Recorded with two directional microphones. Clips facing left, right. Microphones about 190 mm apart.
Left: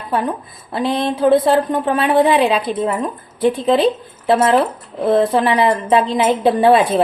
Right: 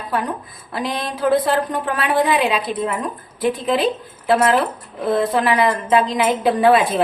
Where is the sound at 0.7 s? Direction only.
25° left (ahead or behind).